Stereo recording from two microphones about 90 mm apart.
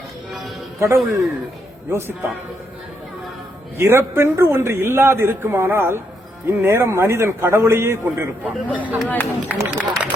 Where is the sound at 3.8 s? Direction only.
25° right (ahead or behind).